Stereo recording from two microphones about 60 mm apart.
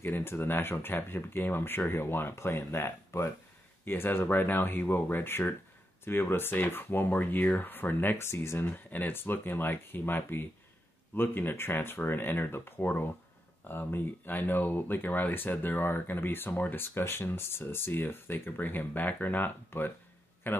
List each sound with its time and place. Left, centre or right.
0.0 s speech: left
8.5 s speech: left
16.8 s speech: left